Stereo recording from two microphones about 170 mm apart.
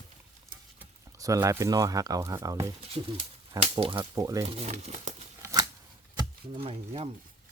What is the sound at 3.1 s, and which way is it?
Speech, 35° right (ahead or behind).